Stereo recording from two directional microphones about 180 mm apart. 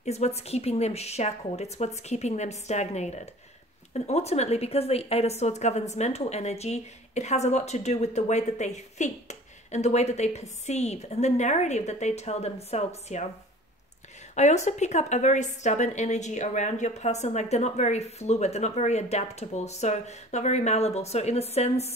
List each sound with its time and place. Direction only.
0.0 s a woman's voice: 35° left (ahead or behind)
14.3 s a woman's voice: 40° left (ahead or behind)